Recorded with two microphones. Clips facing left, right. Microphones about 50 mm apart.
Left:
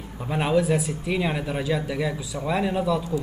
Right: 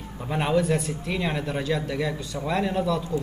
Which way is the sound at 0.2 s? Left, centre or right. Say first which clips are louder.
Left 1 dB; centre.